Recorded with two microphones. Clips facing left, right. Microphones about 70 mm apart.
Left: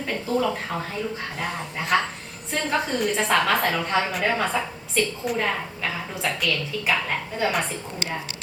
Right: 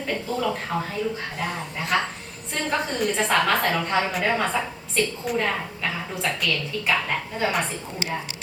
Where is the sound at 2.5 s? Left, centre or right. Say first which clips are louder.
Left 1 dB; centre.